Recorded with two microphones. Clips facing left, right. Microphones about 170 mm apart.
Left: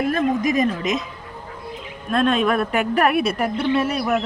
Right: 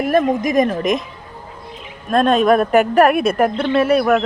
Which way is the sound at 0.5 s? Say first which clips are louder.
Right 5 dB; 50° right (ahead or behind).